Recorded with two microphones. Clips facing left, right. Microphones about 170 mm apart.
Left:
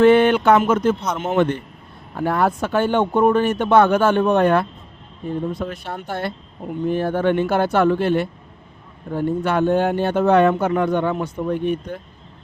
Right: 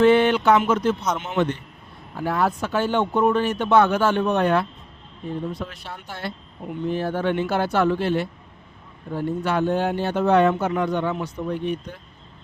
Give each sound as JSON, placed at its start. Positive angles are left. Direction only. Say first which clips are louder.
{"t": 0.0, "sound": "speech", "louder": "left 3 dB", "side_deg": 55}